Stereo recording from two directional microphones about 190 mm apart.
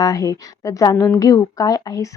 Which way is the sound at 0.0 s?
20° left (ahead or behind).